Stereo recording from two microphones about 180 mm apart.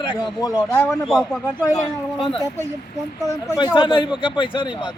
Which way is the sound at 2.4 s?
15° right (ahead or behind).